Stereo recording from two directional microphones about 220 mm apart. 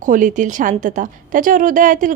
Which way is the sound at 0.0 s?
35° right (ahead or behind).